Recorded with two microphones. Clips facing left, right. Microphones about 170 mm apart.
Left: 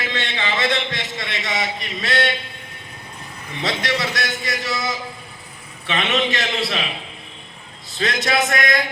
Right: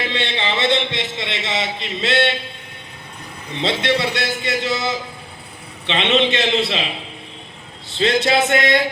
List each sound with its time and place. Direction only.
0.0 s a man's voice: 30° right (ahead or behind)
3.5 s a man's voice: 25° right (ahead or behind)
7.9 s a man's voice: 25° right (ahead or behind)